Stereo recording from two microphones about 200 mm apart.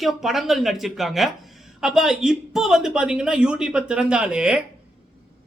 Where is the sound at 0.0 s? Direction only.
Centre (ahead or behind).